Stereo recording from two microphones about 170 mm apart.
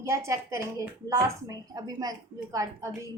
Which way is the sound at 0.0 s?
15° right (ahead or behind).